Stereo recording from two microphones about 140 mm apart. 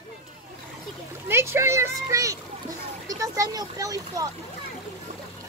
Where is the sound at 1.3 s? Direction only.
20° right (ahead or behind).